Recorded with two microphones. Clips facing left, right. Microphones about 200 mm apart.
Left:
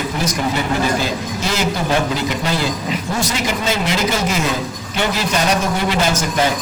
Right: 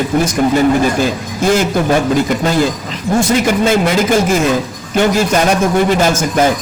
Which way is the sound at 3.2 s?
50° right (ahead or behind).